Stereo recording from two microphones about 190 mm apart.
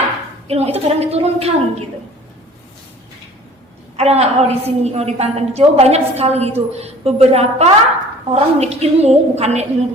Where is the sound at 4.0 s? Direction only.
35° right (ahead or behind).